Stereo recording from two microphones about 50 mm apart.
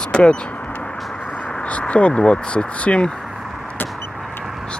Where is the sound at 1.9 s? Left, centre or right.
Left.